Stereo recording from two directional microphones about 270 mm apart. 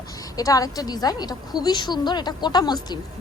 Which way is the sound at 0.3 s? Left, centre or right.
Centre.